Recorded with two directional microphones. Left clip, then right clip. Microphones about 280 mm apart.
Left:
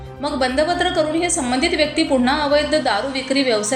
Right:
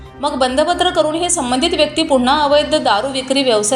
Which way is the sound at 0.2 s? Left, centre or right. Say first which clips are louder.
Right 4 dB; centre.